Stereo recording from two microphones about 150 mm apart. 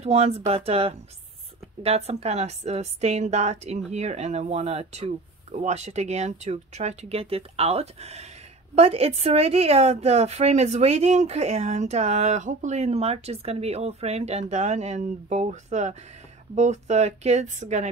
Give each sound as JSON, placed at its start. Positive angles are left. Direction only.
{"t": 0.0, "sound": "a woman's voice", "side_deg": -45}